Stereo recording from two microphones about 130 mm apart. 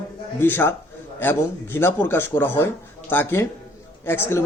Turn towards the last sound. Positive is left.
turn(degrees=20)  # may be behind; listen again after turning